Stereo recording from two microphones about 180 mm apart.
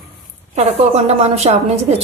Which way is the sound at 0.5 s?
35° right (ahead or behind).